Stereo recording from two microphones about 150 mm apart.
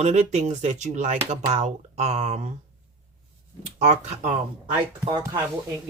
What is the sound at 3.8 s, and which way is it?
Speech, 55° right (ahead or behind).